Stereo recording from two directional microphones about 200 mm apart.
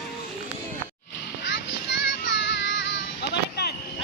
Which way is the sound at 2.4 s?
60° left (ahead or behind).